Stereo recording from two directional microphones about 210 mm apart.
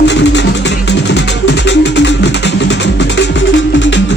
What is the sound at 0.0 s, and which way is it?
Music, 55° left (ahead or behind).